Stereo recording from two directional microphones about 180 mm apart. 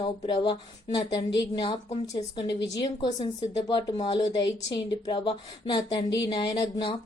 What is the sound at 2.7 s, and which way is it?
A woman's voice, 20° left (ahead or behind).